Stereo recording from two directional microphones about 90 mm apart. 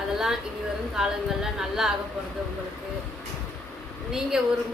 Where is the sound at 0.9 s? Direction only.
5° right (ahead or behind).